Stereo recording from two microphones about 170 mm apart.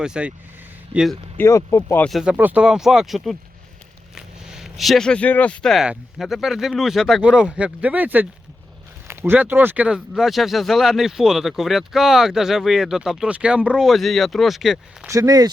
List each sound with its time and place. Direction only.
0.0 s speech: 5° right (ahead or behind)
1.4 s speech: 15° left (ahead or behind)
2.0 s speech: centre (ahead or behind)
15.0 s speech: 20° right (ahead or behind)